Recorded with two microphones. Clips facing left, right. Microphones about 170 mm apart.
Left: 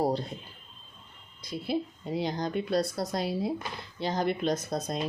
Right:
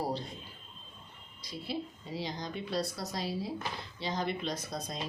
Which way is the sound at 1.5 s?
55° left (ahead or behind).